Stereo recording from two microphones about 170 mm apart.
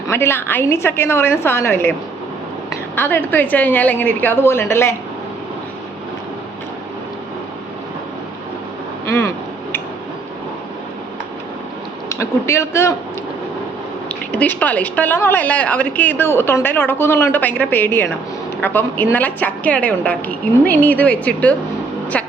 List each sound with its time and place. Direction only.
0.1 s a woman's voice: 15° left (ahead or behind)
9.0 s speech: 15° left (ahead or behind)
12.0 s speech: 15° left (ahead or behind)
14.1 s a woman's voice: 10° left (ahead or behind)